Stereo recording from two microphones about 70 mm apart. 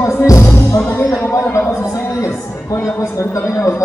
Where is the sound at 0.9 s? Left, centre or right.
Left.